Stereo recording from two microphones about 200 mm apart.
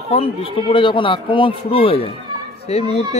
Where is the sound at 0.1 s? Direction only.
25° left (ahead or behind).